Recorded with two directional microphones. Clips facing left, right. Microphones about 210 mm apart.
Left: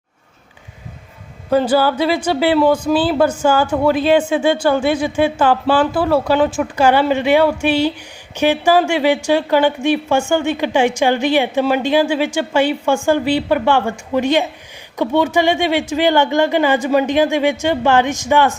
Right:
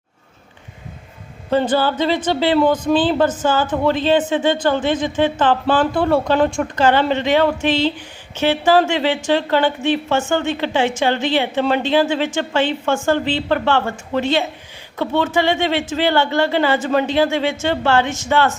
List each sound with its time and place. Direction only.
1.5 s a woman's voice: 10° left (ahead or behind)